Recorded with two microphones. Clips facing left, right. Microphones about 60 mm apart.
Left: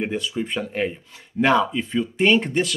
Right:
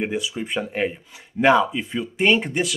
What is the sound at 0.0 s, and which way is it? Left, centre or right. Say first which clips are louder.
Speech: even; centre.